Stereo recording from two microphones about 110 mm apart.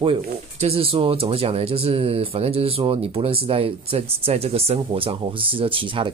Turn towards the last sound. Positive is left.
turn(degrees=-50)  # may be behind; listen again after turning